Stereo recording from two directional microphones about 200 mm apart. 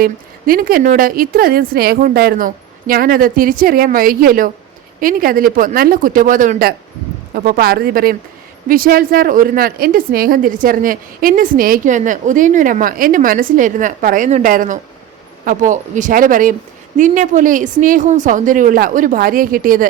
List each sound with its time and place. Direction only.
0.0 s a woman's voice: 45° right (ahead or behind)